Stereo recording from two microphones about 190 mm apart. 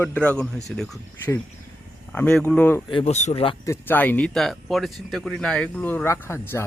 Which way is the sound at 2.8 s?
30° left (ahead or behind).